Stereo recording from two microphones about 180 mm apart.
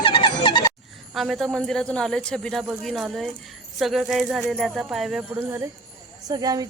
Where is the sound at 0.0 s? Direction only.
30° left (ahead or behind).